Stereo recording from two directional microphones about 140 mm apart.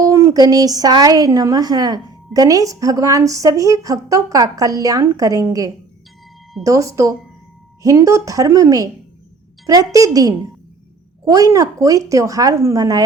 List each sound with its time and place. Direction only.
0.0 s a woman's voice: 20° right (ahead or behind)